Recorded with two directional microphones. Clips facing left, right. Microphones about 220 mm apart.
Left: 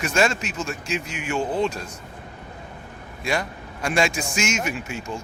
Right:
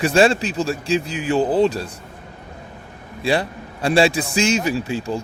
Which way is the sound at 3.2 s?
30° right (ahead or behind).